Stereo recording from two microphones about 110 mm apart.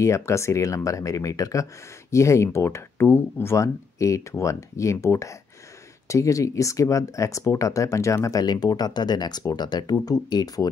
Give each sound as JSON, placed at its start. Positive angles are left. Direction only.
{"t": 0.0, "sound": "speech", "side_deg": 25}